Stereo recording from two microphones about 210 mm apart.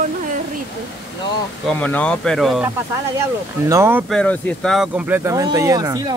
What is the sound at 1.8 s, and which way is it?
Speech, 5° left (ahead or behind).